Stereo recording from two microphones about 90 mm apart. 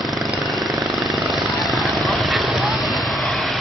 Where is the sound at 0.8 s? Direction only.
50° right (ahead or behind).